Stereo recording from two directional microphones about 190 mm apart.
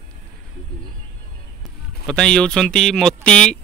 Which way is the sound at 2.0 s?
5° left (ahead or behind).